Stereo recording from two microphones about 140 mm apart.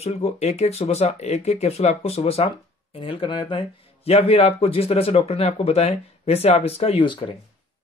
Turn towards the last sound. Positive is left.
turn(degrees=40)  # may be behind; listen again after turning